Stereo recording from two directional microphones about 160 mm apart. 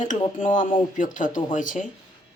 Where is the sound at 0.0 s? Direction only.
50° left (ahead or behind).